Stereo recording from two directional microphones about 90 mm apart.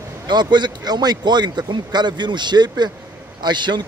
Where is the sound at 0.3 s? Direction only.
55° right (ahead or behind).